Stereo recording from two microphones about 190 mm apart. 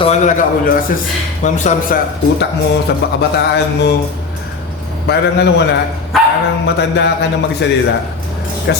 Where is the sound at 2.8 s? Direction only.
60° left (ahead or behind).